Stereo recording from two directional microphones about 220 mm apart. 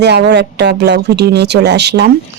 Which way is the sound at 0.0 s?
50° right (ahead or behind).